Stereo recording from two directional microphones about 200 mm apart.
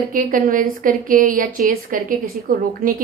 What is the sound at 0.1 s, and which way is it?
A woman's voice, 40° right (ahead or behind).